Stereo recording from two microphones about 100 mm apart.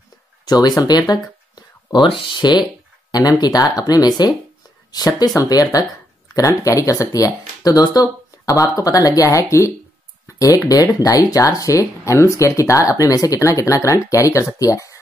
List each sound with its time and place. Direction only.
0.5 s speech: 40° left (ahead or behind)